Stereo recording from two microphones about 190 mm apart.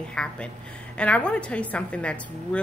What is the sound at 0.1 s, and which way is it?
A woman's voice, 5° left (ahead or behind).